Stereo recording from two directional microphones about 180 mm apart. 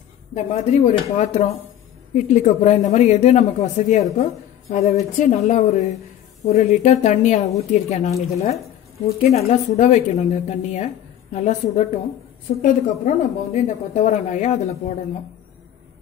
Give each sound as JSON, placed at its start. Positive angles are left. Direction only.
{"t": 0.3, "sound": "speech", "side_deg": 40}